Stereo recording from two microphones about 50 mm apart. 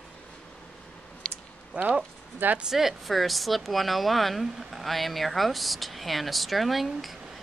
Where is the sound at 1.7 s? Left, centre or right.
Right.